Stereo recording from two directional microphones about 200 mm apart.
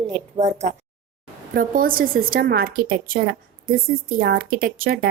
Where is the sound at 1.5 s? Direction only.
45° right (ahead or behind).